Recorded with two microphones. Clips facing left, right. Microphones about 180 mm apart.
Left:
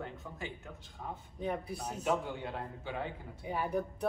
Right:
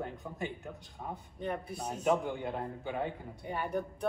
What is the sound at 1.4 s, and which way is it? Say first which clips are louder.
Speech: left 1 dB; centre (ahead or behind).